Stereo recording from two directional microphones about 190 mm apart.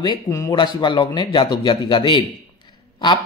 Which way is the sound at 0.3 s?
20° left (ahead or behind).